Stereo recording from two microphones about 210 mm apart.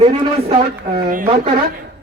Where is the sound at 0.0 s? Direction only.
30° right (ahead or behind).